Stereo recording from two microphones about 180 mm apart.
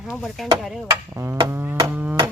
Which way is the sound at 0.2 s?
Centre (ahead or behind).